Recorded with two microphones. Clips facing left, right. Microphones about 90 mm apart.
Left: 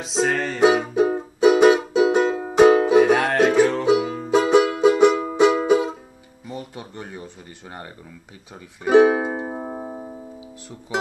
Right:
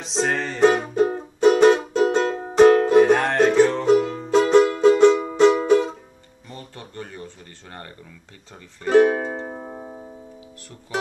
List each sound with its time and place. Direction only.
0.0 s music: 5° left (ahead or behind)
8.8 s music: 10° left (ahead or behind)